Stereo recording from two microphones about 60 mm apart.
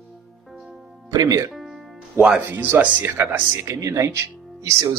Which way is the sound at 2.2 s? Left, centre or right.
Right.